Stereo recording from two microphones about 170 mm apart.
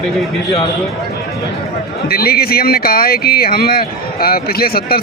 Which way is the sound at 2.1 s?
65° left (ahead or behind).